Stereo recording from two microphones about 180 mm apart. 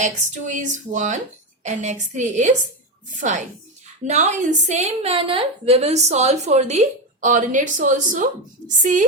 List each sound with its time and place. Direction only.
0.0 s a woman's voice: 45° right (ahead or behind)